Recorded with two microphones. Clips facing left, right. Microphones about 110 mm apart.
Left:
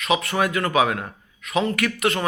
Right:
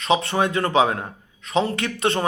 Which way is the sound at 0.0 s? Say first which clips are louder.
Right 2 dB; 30° right (ahead or behind).